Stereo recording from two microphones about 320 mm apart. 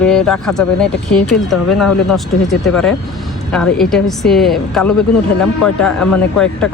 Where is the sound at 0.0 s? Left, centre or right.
Centre.